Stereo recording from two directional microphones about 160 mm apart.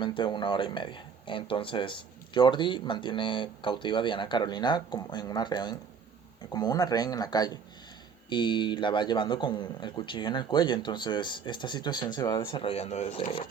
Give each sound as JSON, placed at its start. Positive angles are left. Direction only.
{"t": 0.0, "sound": "speech", "side_deg": 30}